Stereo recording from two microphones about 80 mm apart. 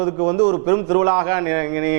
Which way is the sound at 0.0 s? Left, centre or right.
Right.